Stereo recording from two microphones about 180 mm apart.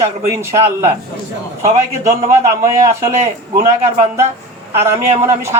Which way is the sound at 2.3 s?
15° right (ahead or behind).